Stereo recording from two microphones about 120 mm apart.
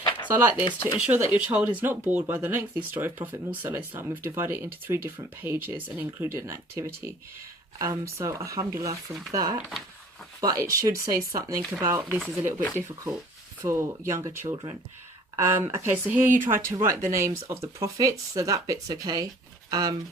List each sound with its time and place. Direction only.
0.3 s speech: 15° right (ahead or behind)
0.6 s speech: 40° left (ahead or behind)
0.9 s speech: 10° right (ahead or behind); by 14.8 s 40° right (ahead or behind)
15.4 s speech: 20° right (ahead or behind)